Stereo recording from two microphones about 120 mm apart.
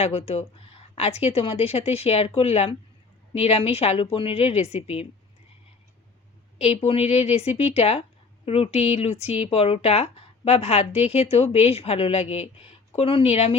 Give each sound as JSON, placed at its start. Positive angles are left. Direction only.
{"t": 0.0, "sound": "speech", "side_deg": 60}
{"t": 6.6, "sound": "speech", "side_deg": 55}